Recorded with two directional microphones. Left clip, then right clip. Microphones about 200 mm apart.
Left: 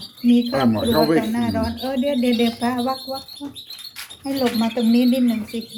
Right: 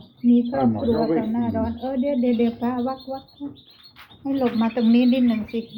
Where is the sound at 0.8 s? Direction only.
40° left (ahead or behind).